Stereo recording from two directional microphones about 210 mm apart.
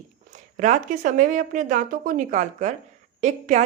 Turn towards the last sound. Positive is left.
turn(degrees=-35)  # may be behind; listen again after turning